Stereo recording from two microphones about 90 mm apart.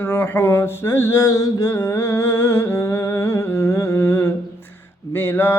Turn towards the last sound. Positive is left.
turn(degrees=25)  # may be behind; listen again after turning